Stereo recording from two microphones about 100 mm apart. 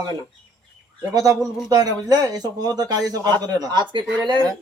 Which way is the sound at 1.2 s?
35° right (ahead or behind).